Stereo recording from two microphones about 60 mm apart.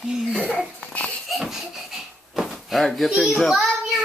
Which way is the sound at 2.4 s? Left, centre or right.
Centre.